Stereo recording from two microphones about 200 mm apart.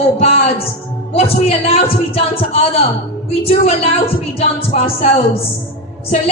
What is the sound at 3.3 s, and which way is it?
Music, 30° left (ahead or behind).